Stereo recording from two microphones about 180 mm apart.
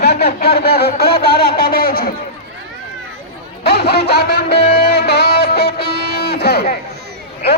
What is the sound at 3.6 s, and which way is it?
Music, 65° left (ahead or behind).